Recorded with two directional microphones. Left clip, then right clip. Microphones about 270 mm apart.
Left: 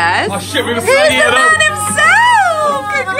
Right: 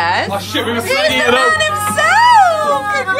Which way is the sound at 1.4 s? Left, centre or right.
Centre.